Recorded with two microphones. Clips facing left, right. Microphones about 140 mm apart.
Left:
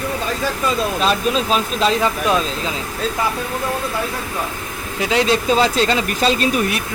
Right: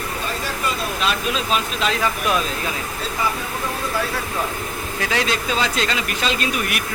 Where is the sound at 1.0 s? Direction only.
40° left (ahead or behind).